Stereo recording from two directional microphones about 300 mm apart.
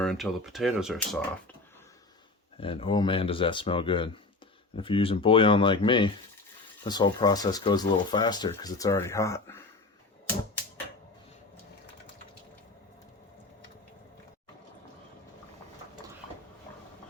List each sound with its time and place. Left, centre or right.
0.0 s speech: centre
2.6 s speech: centre